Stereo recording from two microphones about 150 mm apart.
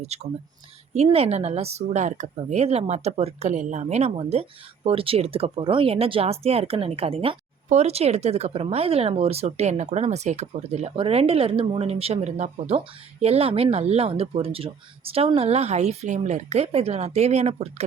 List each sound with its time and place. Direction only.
0.0 s speech: 45° right (ahead or behind)